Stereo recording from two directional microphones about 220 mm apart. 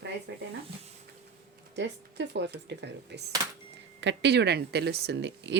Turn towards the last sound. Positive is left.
turn(degrees=-50)  # may be behind; listen again after turning